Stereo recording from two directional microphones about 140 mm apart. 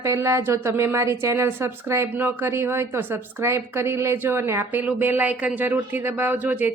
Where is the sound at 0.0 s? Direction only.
20° right (ahead or behind).